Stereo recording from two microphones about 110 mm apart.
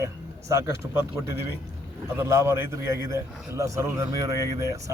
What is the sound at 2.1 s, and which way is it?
A man's voice, 25° right (ahead or behind).